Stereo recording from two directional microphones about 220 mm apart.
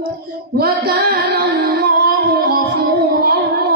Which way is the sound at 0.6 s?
45° right (ahead or behind).